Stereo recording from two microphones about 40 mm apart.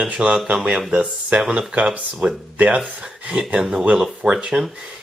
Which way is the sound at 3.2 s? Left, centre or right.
Centre.